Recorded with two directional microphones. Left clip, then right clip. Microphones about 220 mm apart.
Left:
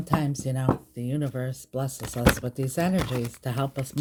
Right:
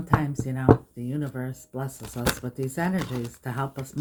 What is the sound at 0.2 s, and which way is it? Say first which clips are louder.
Speech: even; 50° left (ahead or behind).